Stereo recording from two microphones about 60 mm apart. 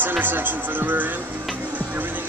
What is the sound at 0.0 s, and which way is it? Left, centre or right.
Speech, right.